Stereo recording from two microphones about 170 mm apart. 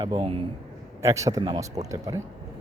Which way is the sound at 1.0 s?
20° right (ahead or behind).